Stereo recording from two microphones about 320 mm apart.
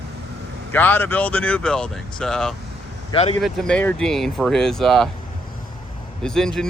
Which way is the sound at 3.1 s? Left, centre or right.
Centre.